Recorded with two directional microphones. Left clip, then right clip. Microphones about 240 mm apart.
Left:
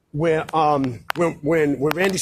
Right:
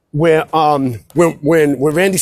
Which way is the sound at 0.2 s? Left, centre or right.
Right.